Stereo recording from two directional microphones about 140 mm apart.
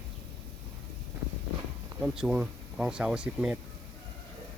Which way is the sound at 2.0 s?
5° right (ahead or behind).